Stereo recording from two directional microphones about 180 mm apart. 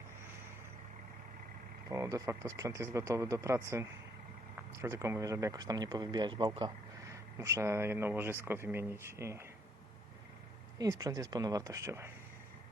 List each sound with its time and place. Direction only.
1.9 s speech: 15° right (ahead or behind)
10.8 s speech: 20° right (ahead or behind)